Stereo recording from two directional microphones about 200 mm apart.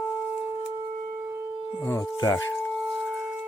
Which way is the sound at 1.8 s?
15° left (ahead or behind).